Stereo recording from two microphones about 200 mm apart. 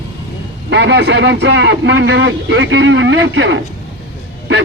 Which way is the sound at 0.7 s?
60° right (ahead or behind).